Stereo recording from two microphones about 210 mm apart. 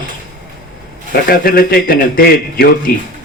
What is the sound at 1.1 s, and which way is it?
A man's voice, 45° left (ahead or behind).